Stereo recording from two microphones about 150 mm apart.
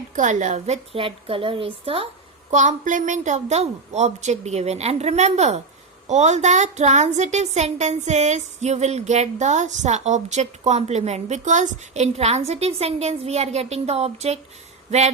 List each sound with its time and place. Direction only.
0.2 s speech: 55° right (ahead or behind)
0.9 s a woman's voice: 35° right (ahead or behind)
2.5 s speech: 55° right (ahead or behind)